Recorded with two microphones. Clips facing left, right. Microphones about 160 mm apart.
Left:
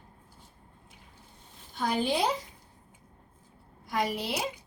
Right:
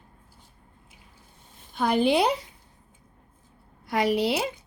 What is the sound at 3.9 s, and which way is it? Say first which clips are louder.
Speech: right 7 dB; 70° right (ahead or behind).